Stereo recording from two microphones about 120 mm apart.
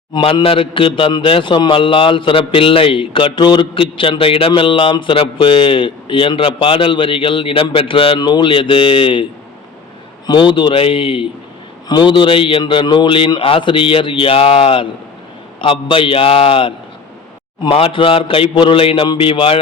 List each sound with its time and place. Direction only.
0.1 s a man's voice: 45° left (ahead or behind)
10.2 s a man's voice: 40° left (ahead or behind)